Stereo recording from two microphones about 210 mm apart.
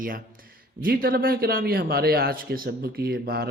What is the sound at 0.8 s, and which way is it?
Speech, 45° right (ahead or behind).